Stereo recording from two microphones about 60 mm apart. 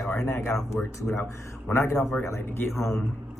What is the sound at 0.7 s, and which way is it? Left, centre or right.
Speech, left.